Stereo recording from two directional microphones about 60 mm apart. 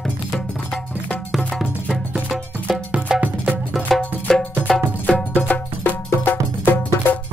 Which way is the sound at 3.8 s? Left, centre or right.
Centre.